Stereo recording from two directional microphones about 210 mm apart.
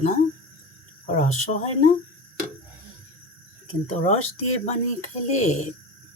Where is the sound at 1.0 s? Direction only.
35° left (ahead or behind).